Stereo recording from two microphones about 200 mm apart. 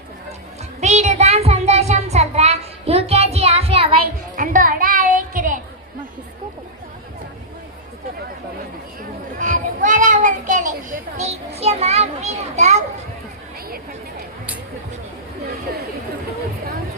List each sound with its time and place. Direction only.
0.8 s child singing: 35° right (ahead or behind)
4.4 s music: 45° right (ahead or behind)
9.4 s children playing: 40° right (ahead or behind)